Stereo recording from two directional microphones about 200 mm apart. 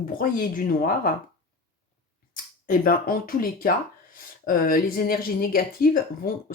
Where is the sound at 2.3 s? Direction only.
45° left (ahead or behind).